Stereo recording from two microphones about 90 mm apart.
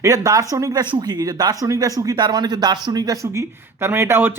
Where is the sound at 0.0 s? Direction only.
40° right (ahead or behind).